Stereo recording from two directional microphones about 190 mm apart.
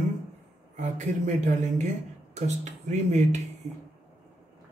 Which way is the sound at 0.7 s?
40° right (ahead or behind).